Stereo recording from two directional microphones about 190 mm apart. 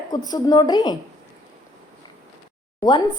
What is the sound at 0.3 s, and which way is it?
Speech, 20° left (ahead or behind).